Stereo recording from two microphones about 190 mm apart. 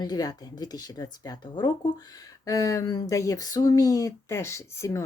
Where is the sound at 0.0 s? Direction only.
20° left (ahead or behind).